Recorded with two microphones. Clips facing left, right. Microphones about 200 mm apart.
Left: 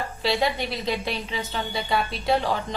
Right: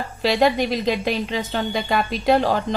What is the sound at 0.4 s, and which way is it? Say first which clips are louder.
A woman's voice: right 7 dB; 45° right (ahead or behind).